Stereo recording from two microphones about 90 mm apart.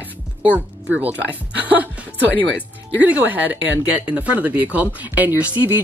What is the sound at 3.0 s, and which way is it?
Speech, 15° right (ahead or behind).